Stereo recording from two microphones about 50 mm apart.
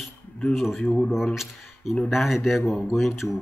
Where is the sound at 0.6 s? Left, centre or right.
Centre.